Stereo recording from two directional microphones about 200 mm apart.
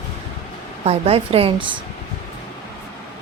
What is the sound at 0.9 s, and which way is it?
Speech, 30° right (ahead or behind).